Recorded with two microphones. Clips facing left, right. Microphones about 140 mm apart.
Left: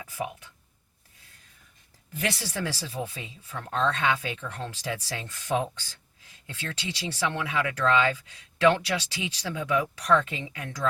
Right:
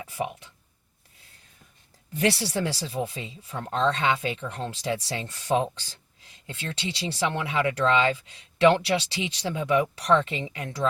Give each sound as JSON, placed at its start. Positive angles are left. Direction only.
{"t": 0.0, "sound": "speech", "side_deg": -30}
{"t": 2.1, "sound": "speech", "side_deg": -35}